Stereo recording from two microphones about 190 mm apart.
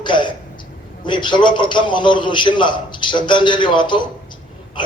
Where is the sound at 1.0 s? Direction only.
25° left (ahead or behind).